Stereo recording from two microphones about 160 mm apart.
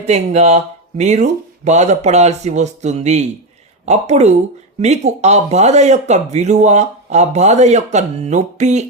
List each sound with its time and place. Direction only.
0.0 s speech: 45° right (ahead or behind)